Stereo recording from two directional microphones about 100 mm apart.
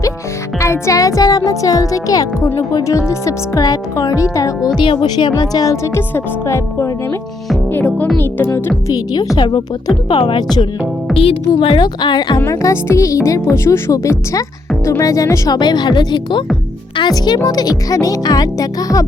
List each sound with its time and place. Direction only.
0.6 s speech: 30° left (ahead or behind); by 5.3 s 55° left (ahead or behind)
5.4 s speech: 35° left (ahead or behind)
7.7 s speech: 15° left (ahead or behind)
8.9 s speech: 35° left (ahead or behind)
11.1 s music: centre (ahead or behind)
11.6 s speech: 55° left (ahead or behind)
12.5 s speech: 30° left (ahead or behind)